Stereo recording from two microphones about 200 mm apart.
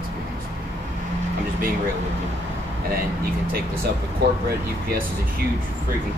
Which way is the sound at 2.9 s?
50° right (ahead or behind).